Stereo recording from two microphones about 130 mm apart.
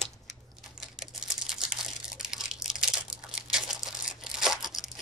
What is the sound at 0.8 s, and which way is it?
Computer keyboard, centre (ahead or behind).